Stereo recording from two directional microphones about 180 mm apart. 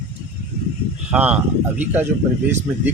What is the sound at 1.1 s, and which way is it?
Speech, 5° right (ahead or behind).